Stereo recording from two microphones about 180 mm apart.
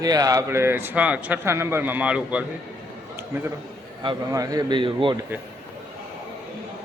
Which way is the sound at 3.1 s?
10° right (ahead or behind).